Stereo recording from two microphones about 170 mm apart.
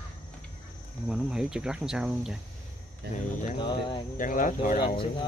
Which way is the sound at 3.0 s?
70° right (ahead or behind).